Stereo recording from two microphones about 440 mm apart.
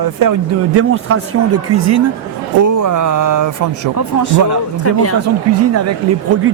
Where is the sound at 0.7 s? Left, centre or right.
Right.